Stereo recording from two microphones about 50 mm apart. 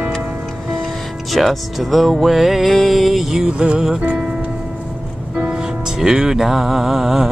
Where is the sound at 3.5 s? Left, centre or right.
Centre.